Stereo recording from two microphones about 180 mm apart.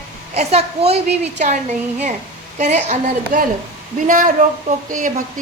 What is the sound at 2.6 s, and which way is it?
A woman's voice, 40° right (ahead or behind).